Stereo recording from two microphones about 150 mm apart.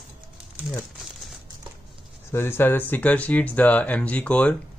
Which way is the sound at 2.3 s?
15° left (ahead or behind).